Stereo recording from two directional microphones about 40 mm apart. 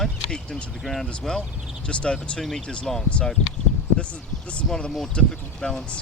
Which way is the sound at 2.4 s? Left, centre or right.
Centre.